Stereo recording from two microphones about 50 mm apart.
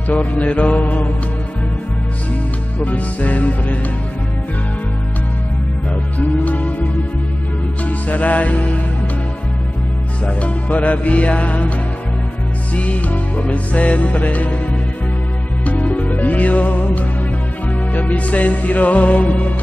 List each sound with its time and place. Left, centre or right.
0.1 s music: left
0.7 s music: left
2.8 s music: left
6.1 s music: left
10.2 s music: left
12.7 s music: left
15.6 s music: left